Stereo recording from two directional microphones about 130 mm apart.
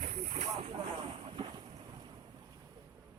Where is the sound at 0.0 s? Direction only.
55° right (ahead or behind).